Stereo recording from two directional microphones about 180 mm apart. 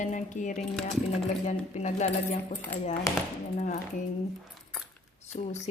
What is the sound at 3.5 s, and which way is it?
Speech, 40° left (ahead or behind).